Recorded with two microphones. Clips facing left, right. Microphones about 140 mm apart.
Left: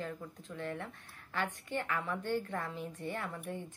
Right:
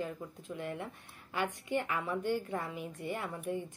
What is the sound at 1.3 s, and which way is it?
A woman's voice, 15° right (ahead or behind).